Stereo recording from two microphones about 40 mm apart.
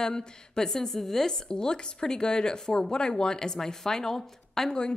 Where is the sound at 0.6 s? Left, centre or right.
Centre.